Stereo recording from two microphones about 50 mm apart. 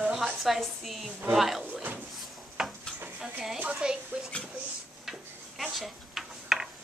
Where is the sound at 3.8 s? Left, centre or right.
Centre.